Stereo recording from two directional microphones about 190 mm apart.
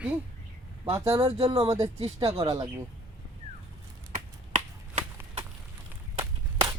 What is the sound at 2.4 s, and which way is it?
Speech, 20° right (ahead or behind).